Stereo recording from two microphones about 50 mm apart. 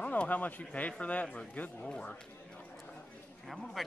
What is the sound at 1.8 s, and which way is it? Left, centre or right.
Speech, centre.